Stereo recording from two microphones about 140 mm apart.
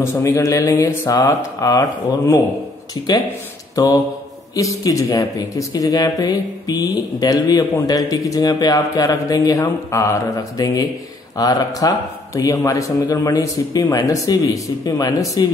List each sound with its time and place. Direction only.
0.0 s speech: 20° left (ahead or behind)
3.8 s speech: 25° left (ahead or behind)